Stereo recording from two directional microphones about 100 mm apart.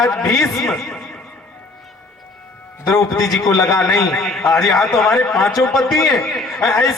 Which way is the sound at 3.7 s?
Centre (ahead or behind).